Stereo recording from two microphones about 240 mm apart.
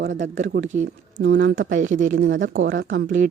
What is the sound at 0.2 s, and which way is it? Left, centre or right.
Speech, right.